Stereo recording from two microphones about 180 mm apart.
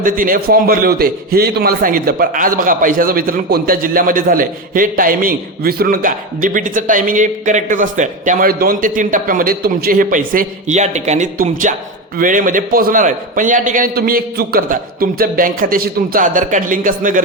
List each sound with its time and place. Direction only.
0.0 s a man's voice: 50° right (ahead or behind)